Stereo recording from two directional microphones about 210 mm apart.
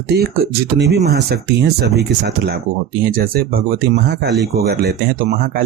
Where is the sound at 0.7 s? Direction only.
50° right (ahead or behind).